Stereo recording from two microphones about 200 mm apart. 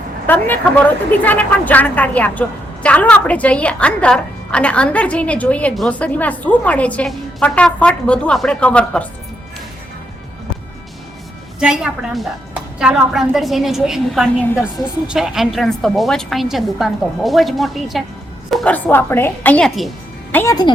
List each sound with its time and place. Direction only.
0.3 s a woman's voice: 10° left (ahead or behind)
11.6 s a woman's voice: 5° right (ahead or behind)
20.3 s a woman's voice: 15° left (ahead or behind)